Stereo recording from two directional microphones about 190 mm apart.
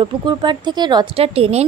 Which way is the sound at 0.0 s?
25° right (ahead or behind).